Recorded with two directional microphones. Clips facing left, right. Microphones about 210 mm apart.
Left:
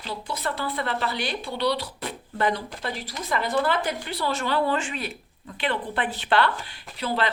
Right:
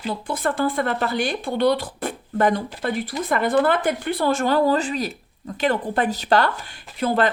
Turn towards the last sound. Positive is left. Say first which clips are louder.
# right 7 dB
turn(degrees=-50)  # may be behind; listen again after turning